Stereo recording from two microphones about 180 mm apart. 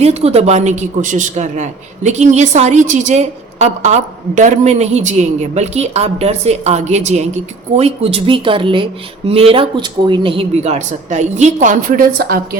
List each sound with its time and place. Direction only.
0.0 s a man's voice: 35° right (ahead or behind); by 12.5 s 60° right (ahead or behind)